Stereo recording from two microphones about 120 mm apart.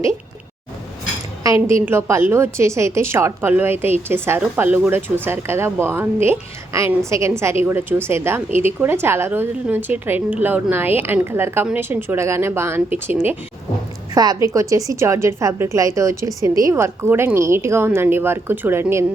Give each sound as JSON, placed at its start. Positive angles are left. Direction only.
{"t": 1.6, "sound": "a woman's voice", "side_deg": -20}
{"t": 14.1, "sound": "a woman's voice", "side_deg": -30}